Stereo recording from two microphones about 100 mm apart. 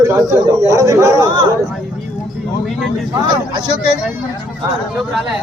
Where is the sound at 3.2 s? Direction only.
45° right (ahead or behind).